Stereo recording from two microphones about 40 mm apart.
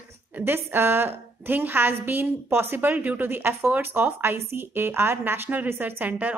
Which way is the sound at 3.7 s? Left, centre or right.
Right.